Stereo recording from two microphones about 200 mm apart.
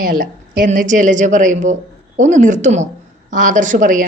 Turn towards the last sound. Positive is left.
turn(degrees=-40)  # may be behind; listen again after turning